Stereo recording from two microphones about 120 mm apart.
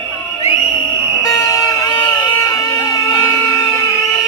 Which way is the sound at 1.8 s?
35° left (ahead or behind).